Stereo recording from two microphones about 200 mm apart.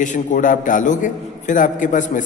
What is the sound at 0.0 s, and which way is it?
A man's voice, 40° left (ahead or behind).